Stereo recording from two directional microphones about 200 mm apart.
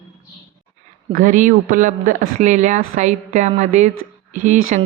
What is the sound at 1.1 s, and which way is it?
Speech, 40° right (ahead or behind).